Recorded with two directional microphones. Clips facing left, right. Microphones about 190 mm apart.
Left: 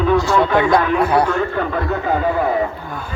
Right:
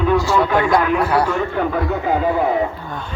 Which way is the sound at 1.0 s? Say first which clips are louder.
Left 2 dB; 20° left (ahead or behind).